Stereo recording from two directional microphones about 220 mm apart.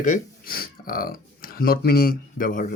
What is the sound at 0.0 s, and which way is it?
Speech, 40° left (ahead or behind).